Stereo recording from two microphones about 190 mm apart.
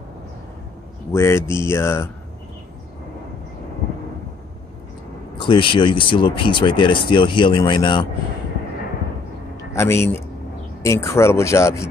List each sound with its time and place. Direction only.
1.1 s speech: 15° left (ahead or behind)
5.4 s speech: 25° left (ahead or behind)
9.8 s speech: 15° left (ahead or behind)